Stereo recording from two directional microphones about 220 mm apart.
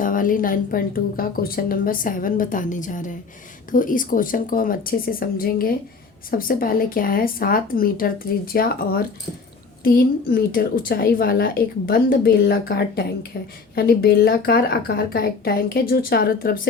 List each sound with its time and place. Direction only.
0.0 s a woman's voice: 40° left (ahead or behind)